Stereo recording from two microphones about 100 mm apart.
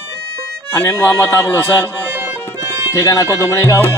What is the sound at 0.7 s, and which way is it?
Music, 30° left (ahead or behind).